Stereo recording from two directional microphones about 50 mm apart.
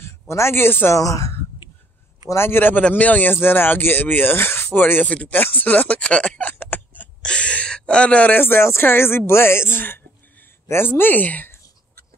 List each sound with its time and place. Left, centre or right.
0.0 s speech: left
0.9 s a woman's voice: left
2.2 s speech: left
2.9 s speech: left
3.3 s speech: left
6.4 s a sound: left
7.2 s a sound: left
8.3 s speech: left